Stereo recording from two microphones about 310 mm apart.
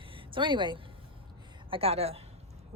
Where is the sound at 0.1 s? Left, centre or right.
Centre.